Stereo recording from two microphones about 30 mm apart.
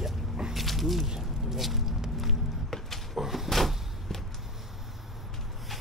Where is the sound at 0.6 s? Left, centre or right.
Centre.